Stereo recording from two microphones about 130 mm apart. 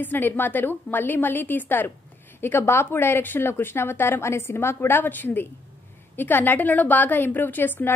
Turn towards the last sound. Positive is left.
turn(degrees=15)  # may be behind; listen again after turning